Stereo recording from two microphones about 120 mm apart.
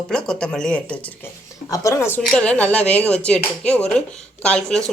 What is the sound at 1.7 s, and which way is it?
Speech, 25° left (ahead or behind).